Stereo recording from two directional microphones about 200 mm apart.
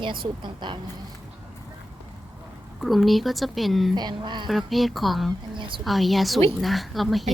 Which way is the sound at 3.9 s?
20° right (ahead or behind).